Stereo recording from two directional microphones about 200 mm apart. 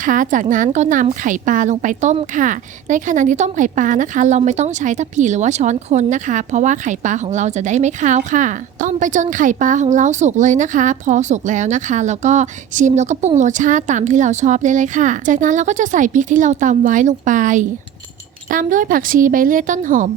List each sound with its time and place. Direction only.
0.0 s a woman's voice: 40° right (ahead or behind)